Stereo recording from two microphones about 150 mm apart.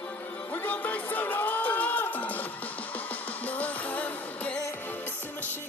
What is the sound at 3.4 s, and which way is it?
Music, 10° left (ahead or behind).